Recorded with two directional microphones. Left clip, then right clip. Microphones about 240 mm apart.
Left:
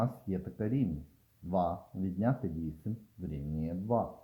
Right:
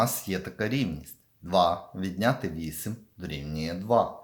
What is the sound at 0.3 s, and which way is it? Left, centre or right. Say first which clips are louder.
Speech: right 5 dB; centre.